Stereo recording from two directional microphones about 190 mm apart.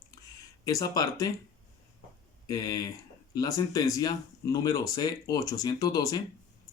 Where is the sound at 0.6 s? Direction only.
20° left (ahead or behind).